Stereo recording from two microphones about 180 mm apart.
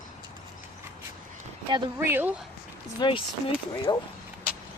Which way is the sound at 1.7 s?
15° right (ahead or behind).